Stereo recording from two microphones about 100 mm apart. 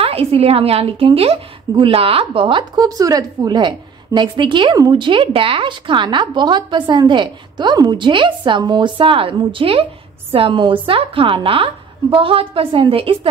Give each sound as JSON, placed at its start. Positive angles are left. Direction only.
{"t": 0.0, "sound": "a woman's voice", "side_deg": -75}
{"t": 2.8, "sound": "a woman's voice", "side_deg": -40}